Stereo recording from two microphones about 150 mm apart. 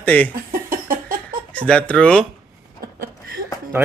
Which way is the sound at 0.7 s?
70° right (ahead or behind).